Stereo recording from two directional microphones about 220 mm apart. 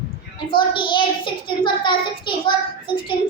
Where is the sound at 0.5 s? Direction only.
20° left (ahead or behind).